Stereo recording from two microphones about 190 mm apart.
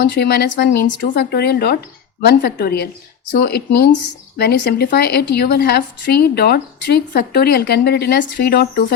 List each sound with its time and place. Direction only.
0.0 s speech: 60° left (ahead or behind)